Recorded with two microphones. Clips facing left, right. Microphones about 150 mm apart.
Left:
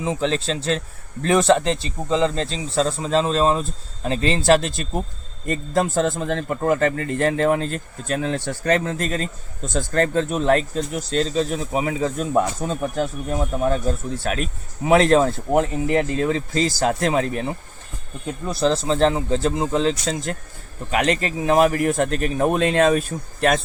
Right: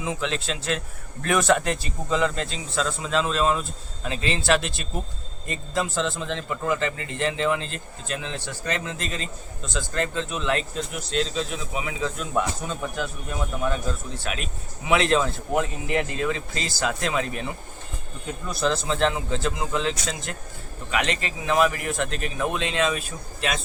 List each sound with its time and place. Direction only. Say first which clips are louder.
0.0 s a man's voice: left 6 dB; 35° left (ahead or behind); by 23.6 s 50° left (ahead or behind)